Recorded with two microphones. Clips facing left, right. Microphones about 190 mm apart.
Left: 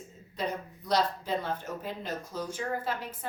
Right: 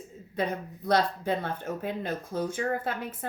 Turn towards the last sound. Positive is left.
turn(degrees=-55)  # may be behind; listen again after turning